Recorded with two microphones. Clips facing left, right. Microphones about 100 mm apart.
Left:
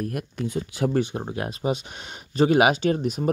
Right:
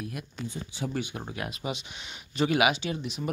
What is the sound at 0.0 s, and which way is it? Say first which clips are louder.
Speech: left 8 dB; 55° left (ahead or behind).